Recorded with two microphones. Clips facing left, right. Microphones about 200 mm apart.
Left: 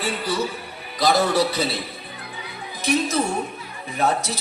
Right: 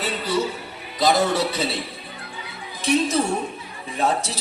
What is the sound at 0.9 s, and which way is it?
Speech, 25° right (ahead or behind).